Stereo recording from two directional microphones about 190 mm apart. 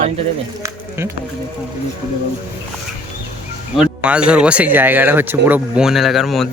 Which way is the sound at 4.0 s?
5° right (ahead or behind).